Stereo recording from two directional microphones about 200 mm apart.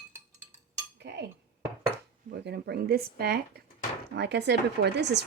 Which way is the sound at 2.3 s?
55° right (ahead or behind).